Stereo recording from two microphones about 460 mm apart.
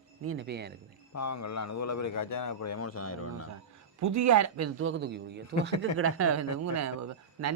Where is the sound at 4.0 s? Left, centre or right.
Right.